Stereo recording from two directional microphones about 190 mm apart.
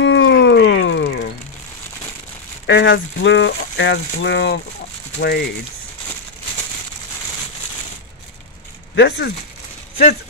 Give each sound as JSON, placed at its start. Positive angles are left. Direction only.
{"t": 0.0, "sound": "a sound", "side_deg": 75}
{"t": 2.6, "sound": "speech", "side_deg": 70}
{"t": 8.9, "sound": "speech", "side_deg": 65}